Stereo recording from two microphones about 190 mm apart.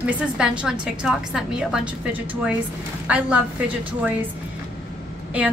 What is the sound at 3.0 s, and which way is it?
Speech, 5° right (ahead or behind).